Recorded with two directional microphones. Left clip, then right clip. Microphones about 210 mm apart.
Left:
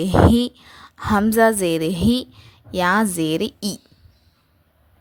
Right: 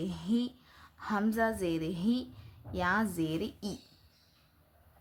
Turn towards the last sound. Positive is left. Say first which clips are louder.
# left 14 dB
turn(degrees=45)  # may be behind; listen again after turning